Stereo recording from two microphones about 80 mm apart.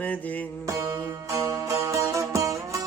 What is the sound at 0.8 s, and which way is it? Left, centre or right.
Music, right.